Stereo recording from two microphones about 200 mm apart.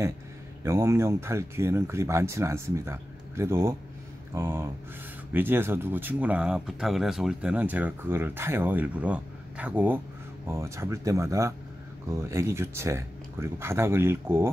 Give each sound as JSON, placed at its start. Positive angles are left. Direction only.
{"t": 0.7, "sound": "speech", "side_deg": -15}